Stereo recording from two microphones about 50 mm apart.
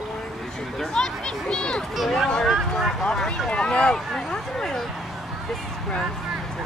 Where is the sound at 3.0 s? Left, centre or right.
Centre.